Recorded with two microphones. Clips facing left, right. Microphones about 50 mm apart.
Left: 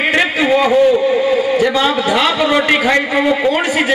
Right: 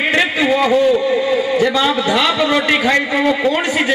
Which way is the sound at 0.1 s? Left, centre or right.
Centre.